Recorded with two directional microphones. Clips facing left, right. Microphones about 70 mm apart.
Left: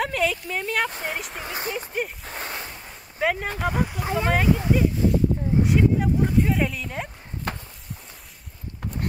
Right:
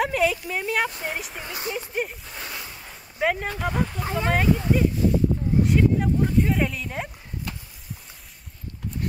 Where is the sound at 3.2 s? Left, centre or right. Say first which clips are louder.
Even; centre.